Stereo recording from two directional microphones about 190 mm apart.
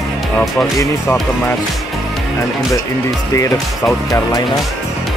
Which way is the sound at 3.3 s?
15° left (ahead or behind).